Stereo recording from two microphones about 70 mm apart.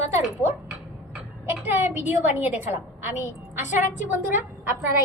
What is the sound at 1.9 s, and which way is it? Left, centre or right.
A woman's voice, right.